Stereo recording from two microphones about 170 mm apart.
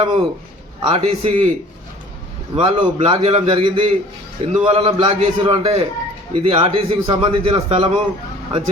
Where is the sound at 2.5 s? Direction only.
30° right (ahead or behind).